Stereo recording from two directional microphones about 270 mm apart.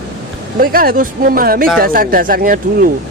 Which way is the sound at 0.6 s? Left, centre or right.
Right.